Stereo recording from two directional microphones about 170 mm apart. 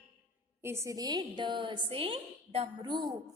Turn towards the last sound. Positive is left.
turn(degrees=-25)  # may be behind; listen again after turning